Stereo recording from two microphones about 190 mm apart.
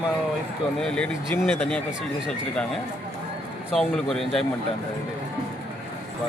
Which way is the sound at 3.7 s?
Centre (ahead or behind).